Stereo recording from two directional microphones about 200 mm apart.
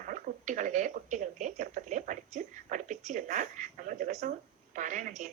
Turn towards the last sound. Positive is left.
turn(degrees=-40)  # may be behind; listen again after turning